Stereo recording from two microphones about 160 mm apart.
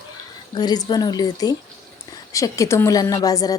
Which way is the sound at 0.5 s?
25° left (ahead or behind).